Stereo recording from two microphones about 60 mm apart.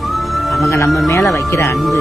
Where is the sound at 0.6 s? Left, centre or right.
Left.